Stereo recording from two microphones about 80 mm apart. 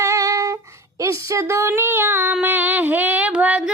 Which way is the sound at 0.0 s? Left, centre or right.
Right.